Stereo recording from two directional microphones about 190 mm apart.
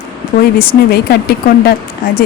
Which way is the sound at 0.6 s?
55° left (ahead or behind).